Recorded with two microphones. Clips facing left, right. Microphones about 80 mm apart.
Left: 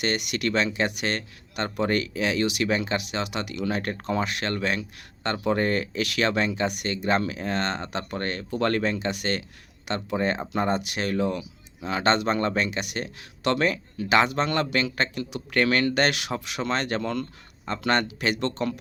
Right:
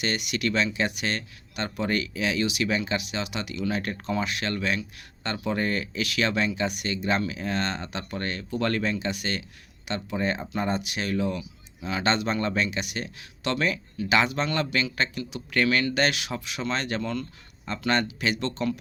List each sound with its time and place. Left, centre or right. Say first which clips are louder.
0.0 s speech: left 1 dB; left
10.2 s speech: left 2 dB; left
10.5 s speech: left 3 dB; left